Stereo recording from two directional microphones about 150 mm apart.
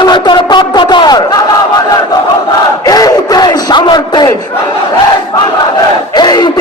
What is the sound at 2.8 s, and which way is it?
Battle cry, 25° left (ahead or behind).